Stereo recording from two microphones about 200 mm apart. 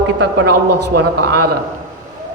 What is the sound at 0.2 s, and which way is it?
Speech, 60° right (ahead or behind).